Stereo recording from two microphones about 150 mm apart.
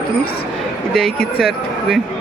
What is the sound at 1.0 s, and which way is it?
Speech, centre (ahead or behind).